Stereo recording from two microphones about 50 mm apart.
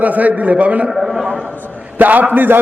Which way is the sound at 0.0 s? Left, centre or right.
Right.